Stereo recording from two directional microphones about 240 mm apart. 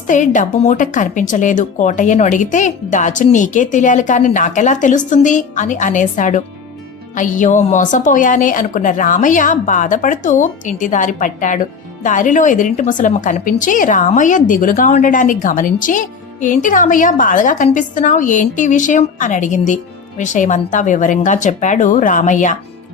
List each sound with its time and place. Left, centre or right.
0.1 s a woman's voice: left